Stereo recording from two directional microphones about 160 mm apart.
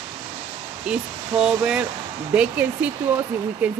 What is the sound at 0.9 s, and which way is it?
Speech, 5° right (ahead or behind).